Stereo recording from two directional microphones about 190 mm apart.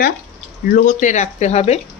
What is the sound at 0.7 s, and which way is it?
Speech, 45° left (ahead or behind).